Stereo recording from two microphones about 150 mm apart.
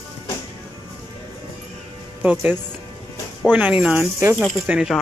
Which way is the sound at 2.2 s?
5° right (ahead or behind).